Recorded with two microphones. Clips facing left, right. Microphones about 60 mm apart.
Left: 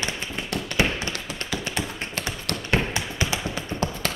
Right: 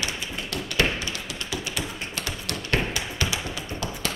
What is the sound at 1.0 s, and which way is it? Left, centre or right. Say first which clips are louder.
Tap: left 2 dB; left.